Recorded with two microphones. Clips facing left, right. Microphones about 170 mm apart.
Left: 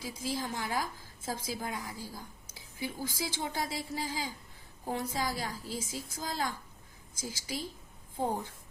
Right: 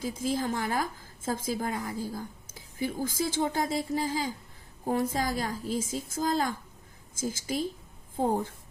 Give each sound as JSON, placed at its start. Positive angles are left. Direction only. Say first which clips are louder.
{"t": 0.2, "sound": "a woman's voice", "louder": "right 5 dB", "side_deg": -50}